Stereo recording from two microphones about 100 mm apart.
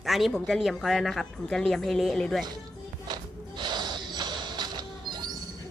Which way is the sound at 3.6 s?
50° right (ahead or behind).